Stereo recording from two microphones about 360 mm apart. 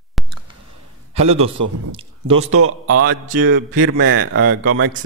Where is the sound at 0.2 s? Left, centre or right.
Centre.